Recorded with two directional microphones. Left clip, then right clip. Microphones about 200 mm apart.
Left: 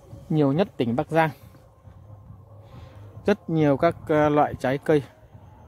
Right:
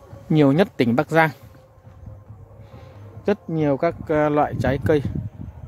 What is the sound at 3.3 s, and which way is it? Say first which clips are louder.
Speech: even; 15° left (ahead or behind).